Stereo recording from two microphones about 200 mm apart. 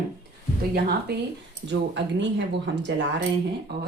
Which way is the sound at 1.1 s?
55° right (ahead or behind).